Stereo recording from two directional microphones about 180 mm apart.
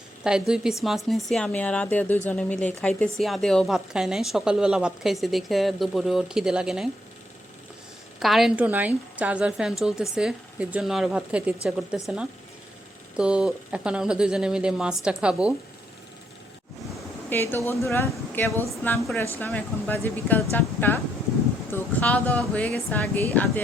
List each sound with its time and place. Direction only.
0.3 s speech: 5° right (ahead or behind)
8.2 s speech: centre (ahead or behind)
17.2 s speech: 10° left (ahead or behind)